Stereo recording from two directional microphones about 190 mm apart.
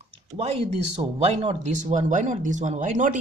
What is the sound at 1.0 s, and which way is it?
Speech, 30° right (ahead or behind).